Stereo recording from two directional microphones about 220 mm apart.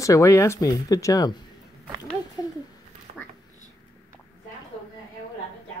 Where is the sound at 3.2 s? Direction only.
5° left (ahead or behind).